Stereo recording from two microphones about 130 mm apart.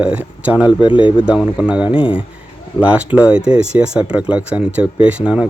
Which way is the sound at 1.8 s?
45° left (ahead or behind).